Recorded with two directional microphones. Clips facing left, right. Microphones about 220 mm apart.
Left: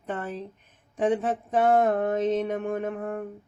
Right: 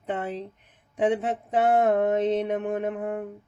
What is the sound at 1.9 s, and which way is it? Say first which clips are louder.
Speech: right 2 dB; 15° right (ahead or behind).